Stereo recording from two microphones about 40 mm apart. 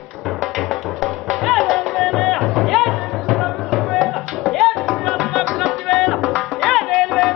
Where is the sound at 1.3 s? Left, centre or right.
Centre.